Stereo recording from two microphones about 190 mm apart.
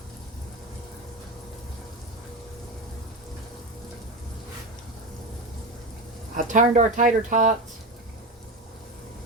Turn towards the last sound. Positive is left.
turn(degrees=-40)  # may be behind; listen again after turning